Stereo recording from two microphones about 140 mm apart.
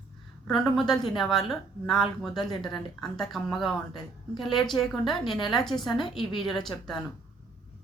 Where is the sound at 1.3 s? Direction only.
Centre (ahead or behind).